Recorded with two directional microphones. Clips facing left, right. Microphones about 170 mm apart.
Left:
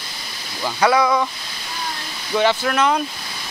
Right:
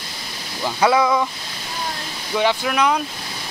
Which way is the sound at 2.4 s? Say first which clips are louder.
Left 1 dB; 10° right (ahead or behind).